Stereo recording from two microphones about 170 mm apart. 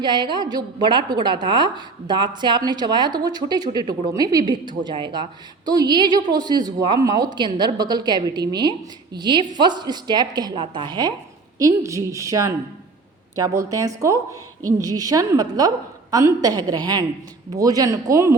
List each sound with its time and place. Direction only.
0.0 s a woman's voice: 25° right (ahead or behind)